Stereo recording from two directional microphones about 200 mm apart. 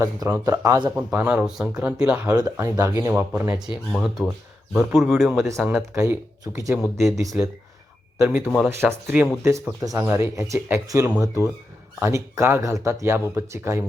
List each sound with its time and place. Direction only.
0.0 s a man's voice: 15° right (ahead or behind)
8.2 s speech: 10° right (ahead or behind)
8.4 s a man's voice: centre (ahead or behind)
9.4 s speech: 15° right (ahead or behind)